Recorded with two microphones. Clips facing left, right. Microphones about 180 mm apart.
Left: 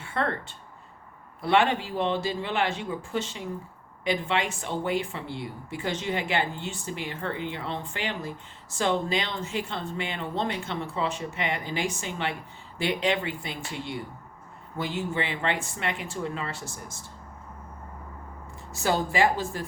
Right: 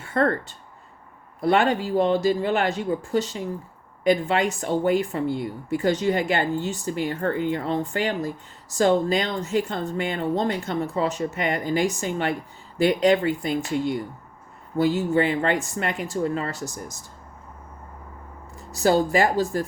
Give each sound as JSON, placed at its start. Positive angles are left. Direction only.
{"t": 0.0, "sound": "speech", "side_deg": -40}
{"t": 18.7, "sound": "speech", "side_deg": -40}